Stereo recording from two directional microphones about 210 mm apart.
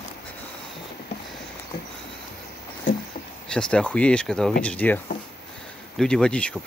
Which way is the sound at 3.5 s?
5° left (ahead or behind).